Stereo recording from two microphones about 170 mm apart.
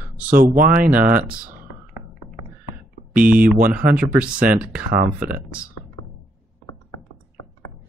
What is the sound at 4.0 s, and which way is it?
Speech, 5° right (ahead or behind).